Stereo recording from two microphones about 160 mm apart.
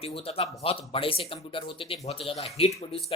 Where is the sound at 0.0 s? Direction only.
35° left (ahead or behind).